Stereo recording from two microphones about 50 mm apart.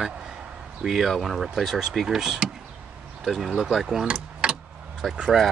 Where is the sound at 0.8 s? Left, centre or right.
Centre.